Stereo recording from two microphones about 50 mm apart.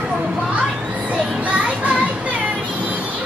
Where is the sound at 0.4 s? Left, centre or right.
Right.